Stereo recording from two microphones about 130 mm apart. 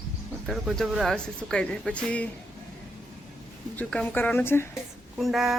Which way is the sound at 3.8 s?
10° left (ahead or behind).